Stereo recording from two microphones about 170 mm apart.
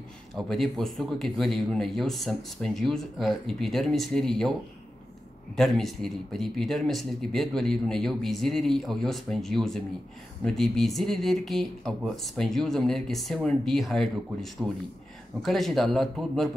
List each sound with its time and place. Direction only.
0.5 s speech: centre (ahead or behind)
5.6 s speech: centre (ahead or behind)